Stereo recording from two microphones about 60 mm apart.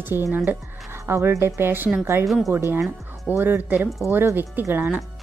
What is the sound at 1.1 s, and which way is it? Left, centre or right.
Speech, right.